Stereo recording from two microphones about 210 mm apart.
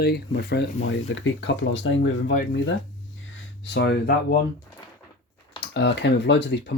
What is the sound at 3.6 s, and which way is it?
Speech, 55° left (ahead or behind).